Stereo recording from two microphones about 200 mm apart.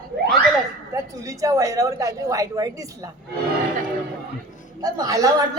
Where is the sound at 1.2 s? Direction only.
15° right (ahead or behind).